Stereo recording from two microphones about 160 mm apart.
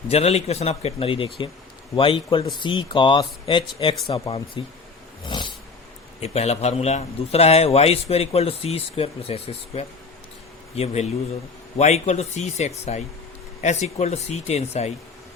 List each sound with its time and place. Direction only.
0.1 s a man's voice: 40° left (ahead or behind)
5.2 s a sound: 30° left (ahead or behind)
6.1 s a man's voice: 40° left (ahead or behind)